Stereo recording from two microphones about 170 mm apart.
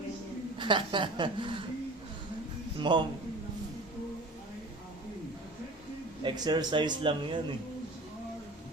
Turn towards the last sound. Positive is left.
turn(degrees=-30)  # may be behind; listen again after turning